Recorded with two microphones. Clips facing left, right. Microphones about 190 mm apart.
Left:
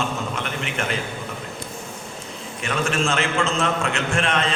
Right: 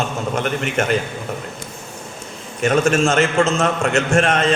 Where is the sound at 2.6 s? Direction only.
45° right (ahead or behind).